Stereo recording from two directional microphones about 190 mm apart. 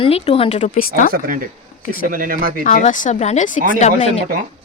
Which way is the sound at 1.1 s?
50° right (ahead or behind).